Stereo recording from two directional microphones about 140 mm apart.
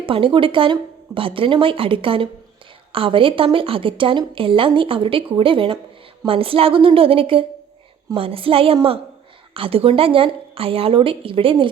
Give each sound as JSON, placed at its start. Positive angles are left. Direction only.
{"t": 0.0, "sound": "a woman's voice", "side_deg": -40}